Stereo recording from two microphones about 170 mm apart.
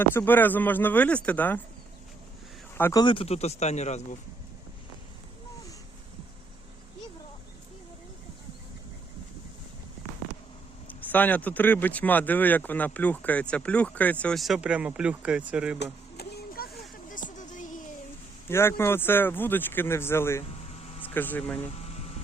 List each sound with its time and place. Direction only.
0.0 s speech: 10° left (ahead or behind)
2.7 s speech: 15° left (ahead or behind)
3.0 s a man's voice: 30° left (ahead or behind)
10.8 s speech: 10° left (ahead or behind); by 15.8 s 5° right (ahead or behind)
15.8 s a sound: 70° left (ahead or behind)
17.1 s music: 50° left (ahead or behind)
18.4 s speech: 15° left (ahead or behind)
21.7 s vehicle: 40° left (ahead or behind)